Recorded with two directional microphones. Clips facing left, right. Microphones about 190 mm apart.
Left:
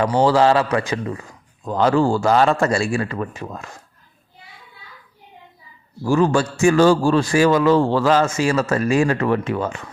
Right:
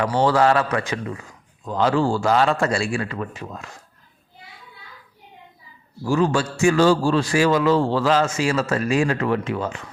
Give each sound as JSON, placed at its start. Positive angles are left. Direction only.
{"t": 0.0, "sound": "a man's voice", "side_deg": 30}
{"t": 1.6, "sound": "a man's voice", "side_deg": 45}
{"t": 6.1, "sound": "a man's voice", "side_deg": 50}